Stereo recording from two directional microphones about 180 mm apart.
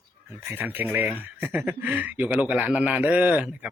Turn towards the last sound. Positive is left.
turn(degrees=-5)  # may be behind; listen again after turning